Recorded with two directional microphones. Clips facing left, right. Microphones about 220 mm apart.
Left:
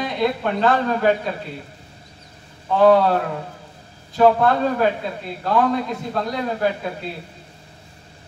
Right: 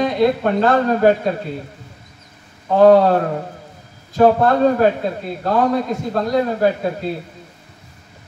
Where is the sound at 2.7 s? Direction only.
45° right (ahead or behind).